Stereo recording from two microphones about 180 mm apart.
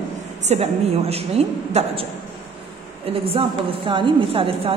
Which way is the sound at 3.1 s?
30° right (ahead or behind).